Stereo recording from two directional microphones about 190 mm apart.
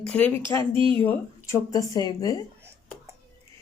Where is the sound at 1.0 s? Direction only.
15° left (ahead or behind).